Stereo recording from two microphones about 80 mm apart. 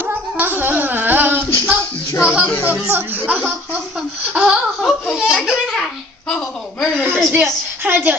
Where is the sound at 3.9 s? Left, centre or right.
Centre.